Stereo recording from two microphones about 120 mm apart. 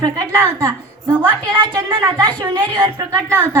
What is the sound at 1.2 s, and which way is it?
A woman's voice, 35° right (ahead or behind).